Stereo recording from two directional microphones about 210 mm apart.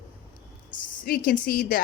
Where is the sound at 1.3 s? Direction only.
45° left (ahead or behind).